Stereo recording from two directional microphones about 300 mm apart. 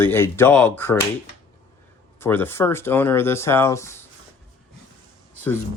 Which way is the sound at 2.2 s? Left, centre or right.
Centre.